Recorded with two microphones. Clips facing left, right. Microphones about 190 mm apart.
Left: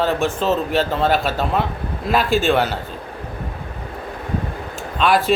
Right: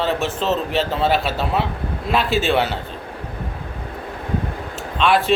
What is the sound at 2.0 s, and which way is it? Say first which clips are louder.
Speech: left 2 dB; centre (ahead or behind).